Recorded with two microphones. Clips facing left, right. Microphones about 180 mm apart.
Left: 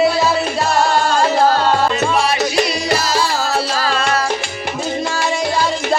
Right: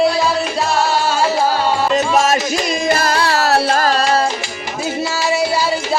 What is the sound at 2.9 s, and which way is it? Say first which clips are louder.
Music: right 2 dB; 55° right (ahead or behind).